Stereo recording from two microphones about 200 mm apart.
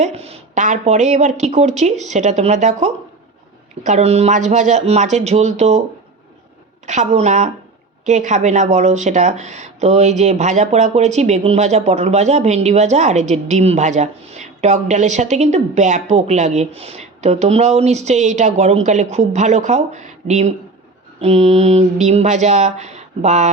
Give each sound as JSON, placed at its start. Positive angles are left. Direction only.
{"t": 0.0, "sound": "speech", "side_deg": -30}
{"t": 6.8, "sound": "speech", "side_deg": -35}